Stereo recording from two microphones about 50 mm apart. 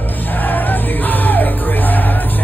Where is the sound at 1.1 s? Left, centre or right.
Left.